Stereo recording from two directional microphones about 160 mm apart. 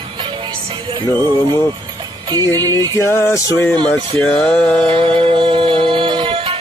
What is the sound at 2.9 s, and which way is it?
Music, 15° left (ahead or behind).